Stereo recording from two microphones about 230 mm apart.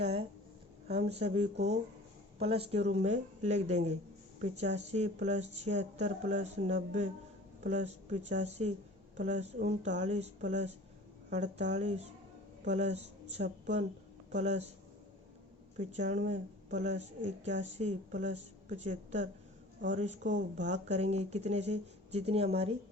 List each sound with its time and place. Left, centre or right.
0.0 s a sound: right
0.9 s speech: right
15.8 s speech: right